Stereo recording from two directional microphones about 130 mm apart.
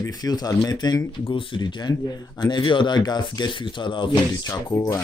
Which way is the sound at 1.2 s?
40° left (ahead or behind).